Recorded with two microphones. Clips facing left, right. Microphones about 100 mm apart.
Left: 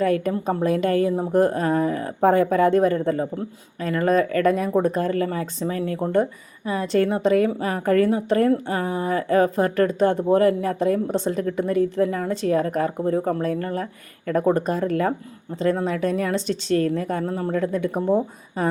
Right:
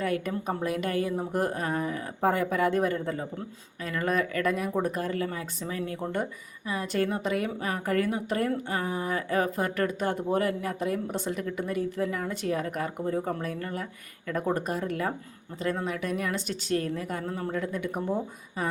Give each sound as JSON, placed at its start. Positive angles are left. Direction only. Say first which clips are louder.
{"t": 0.0, "sound": "a woman's voice", "louder": "left 8 dB", "side_deg": 40}
{"t": 6.0, "sound": "a woman's voice", "louder": "left 10 dB", "side_deg": 35}